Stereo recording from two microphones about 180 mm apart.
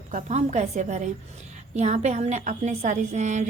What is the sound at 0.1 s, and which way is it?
A woman's voice, 45° right (ahead or behind).